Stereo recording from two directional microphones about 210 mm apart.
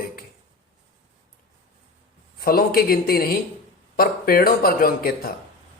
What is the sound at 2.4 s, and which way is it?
A man's voice, 45° left (ahead or behind).